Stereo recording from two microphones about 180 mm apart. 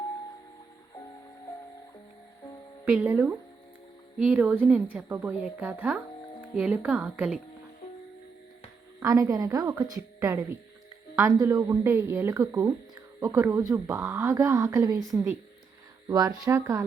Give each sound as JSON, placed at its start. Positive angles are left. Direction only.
{"t": 2.8, "sound": "speech", "side_deg": -10}
{"t": 9.0, "sound": "a woman's voice", "side_deg": -15}
{"t": 16.0, "sound": "speech", "side_deg": -20}